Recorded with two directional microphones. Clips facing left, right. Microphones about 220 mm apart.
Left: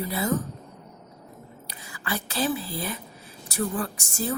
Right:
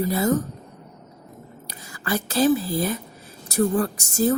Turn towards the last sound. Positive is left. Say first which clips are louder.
# right 8 dB
turn(degrees=-40)  # may be behind; listen again after turning